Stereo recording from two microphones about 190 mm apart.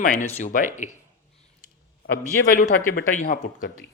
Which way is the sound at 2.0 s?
45° left (ahead or behind).